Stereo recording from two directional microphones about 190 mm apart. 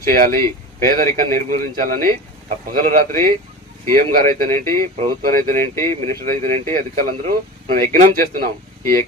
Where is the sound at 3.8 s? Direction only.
50° right (ahead or behind).